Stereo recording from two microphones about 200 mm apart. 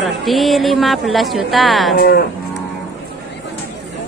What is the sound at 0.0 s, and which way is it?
A woman's voice, centre (ahead or behind).